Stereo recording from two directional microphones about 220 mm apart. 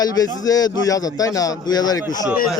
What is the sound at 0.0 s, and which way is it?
A man's voice, 15° left (ahead or behind).